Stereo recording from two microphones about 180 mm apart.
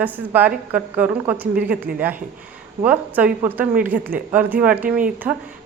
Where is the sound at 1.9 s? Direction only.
50° right (ahead or behind).